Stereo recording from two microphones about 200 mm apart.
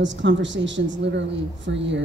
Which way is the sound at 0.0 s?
65° right (ahead or behind).